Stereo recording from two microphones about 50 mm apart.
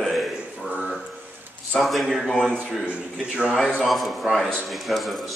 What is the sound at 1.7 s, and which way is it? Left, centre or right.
Speech, centre.